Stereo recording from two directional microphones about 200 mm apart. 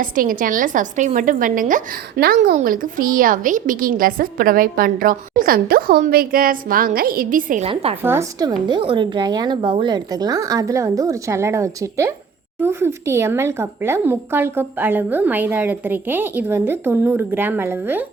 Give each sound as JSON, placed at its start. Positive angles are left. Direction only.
{"t": 0.0, "sound": "a woman's voice", "side_deg": -45}
{"t": 7.7, "sound": "a woman's voice", "side_deg": -30}
{"t": 8.0, "sound": "speech", "side_deg": -15}